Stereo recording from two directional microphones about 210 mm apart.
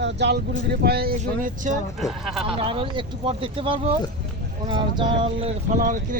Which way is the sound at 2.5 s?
25° right (ahead or behind).